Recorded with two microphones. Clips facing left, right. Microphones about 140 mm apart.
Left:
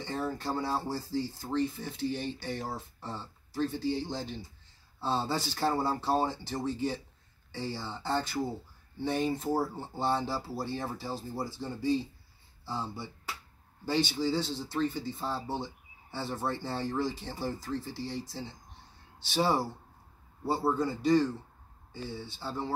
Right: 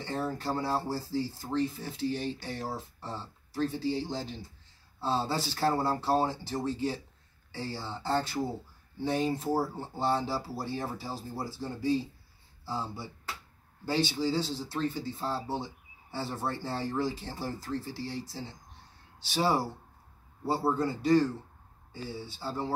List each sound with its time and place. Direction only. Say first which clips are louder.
0.0 s speech: right 1 dB; 5° right (ahead or behind)